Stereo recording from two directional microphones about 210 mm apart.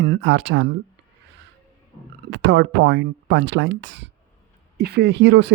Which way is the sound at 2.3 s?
55° right (ahead or behind).